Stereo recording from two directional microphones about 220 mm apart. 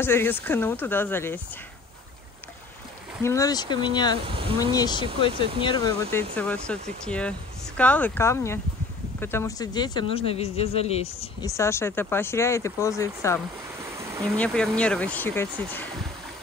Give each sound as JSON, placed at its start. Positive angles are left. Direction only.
{"t": 0.0, "sound": "speech", "side_deg": 10}
{"t": 3.3, "sound": "speech", "side_deg": 15}
{"t": 4.2, "sound": "speech", "side_deg": -25}
{"t": 4.7, "sound": "speech", "side_deg": 20}
{"t": 6.3, "sound": "speech", "side_deg": 5}
{"t": 11.4, "sound": "speech", "side_deg": 15}